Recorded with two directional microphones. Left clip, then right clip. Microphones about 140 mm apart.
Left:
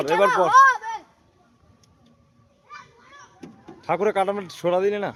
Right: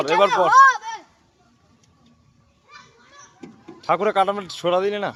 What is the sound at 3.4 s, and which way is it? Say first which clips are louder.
Speech: right 5 dB; 10° left (ahead or behind).